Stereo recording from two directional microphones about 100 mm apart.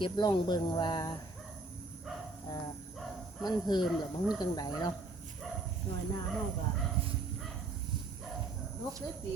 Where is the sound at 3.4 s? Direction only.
50° left (ahead or behind).